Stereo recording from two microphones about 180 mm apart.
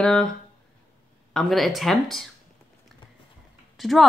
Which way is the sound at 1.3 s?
Centre (ahead or behind).